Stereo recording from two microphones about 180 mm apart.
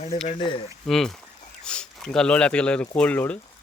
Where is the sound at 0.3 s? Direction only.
25° left (ahead or behind).